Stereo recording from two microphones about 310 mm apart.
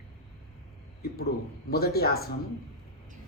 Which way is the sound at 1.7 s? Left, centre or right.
Left.